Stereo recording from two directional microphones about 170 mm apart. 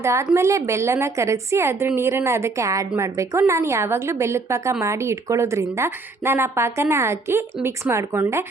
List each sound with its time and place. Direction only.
0.0 s a woman's voice: 15° right (ahead or behind)